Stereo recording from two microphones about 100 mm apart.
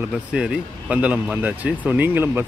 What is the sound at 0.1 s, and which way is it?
Speech, 10° right (ahead or behind).